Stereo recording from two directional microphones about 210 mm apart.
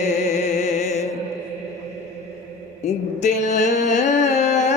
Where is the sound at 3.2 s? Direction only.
35° left (ahead or behind).